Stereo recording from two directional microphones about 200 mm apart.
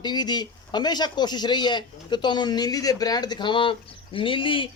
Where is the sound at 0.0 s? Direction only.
20° left (ahead or behind).